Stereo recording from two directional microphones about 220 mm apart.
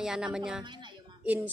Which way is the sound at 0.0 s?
5° right (ahead or behind).